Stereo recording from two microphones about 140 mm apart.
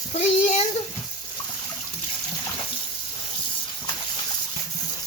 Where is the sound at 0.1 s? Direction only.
55° left (ahead or behind).